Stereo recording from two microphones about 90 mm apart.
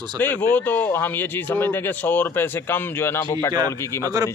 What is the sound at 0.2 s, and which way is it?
Speech, 20° left (ahead or behind).